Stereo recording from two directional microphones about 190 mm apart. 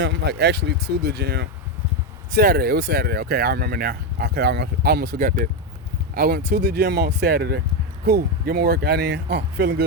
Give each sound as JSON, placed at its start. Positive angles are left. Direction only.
{"t": 0.0, "sound": "speech", "side_deg": -65}